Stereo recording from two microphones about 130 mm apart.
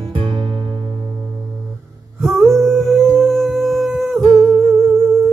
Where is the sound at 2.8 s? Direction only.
5° left (ahead or behind).